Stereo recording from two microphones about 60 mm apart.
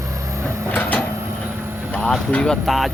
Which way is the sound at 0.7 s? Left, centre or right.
Left.